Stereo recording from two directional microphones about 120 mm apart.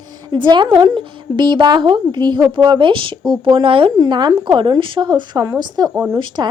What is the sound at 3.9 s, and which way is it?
Speech, 35° right (ahead or behind).